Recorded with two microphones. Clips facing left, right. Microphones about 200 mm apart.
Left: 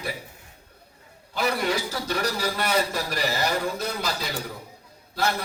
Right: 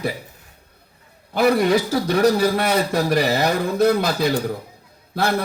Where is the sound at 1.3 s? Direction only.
60° right (ahead or behind).